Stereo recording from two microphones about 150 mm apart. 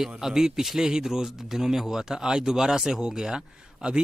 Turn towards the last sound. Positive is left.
turn(degrees=-5)  # may be behind; listen again after turning